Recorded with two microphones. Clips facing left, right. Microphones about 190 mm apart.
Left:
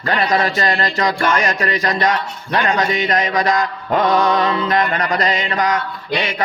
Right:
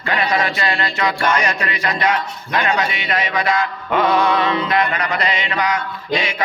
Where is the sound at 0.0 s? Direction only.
40° left (ahead or behind).